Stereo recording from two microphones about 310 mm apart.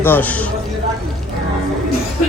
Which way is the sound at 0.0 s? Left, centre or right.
Centre.